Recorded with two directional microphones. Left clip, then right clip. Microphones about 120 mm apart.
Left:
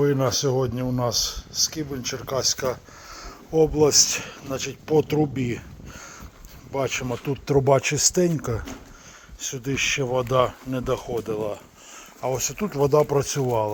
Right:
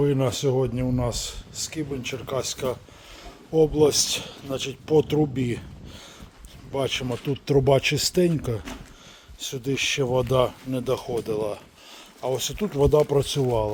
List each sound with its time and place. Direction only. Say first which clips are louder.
0.0 s a man's voice: left 2 dB; 10° right (ahead or behind)
9.5 s speech: left 1 dB; 50° right (ahead or behind)
12.2 s a man's voice: even; 30° right (ahead or behind)